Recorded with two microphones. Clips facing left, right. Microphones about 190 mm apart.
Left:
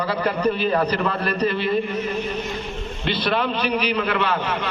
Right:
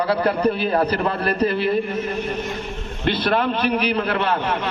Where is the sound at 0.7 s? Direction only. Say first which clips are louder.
Right 1 dB; 45° right (ahead or behind).